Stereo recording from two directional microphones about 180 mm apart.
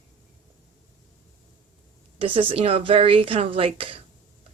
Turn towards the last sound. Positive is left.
turn(degrees=-30)  # may be behind; listen again after turning